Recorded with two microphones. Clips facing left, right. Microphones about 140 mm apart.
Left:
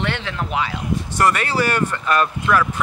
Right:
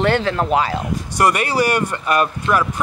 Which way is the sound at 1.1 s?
15° right (ahead or behind).